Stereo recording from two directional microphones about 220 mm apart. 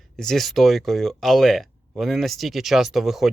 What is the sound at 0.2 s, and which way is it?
Speech, centre (ahead or behind).